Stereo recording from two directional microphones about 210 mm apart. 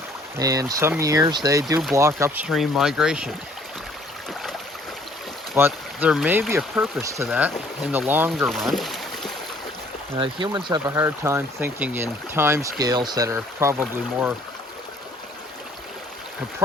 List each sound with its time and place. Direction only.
0.3 s speech: 15° right (ahead or behind)
5.5 s speech: 10° right (ahead or behind)
10.2 s speech: 20° right (ahead or behind); by 14.3 s 5° right (ahead or behind)